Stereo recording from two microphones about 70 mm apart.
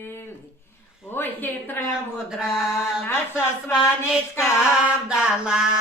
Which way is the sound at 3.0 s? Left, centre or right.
Left.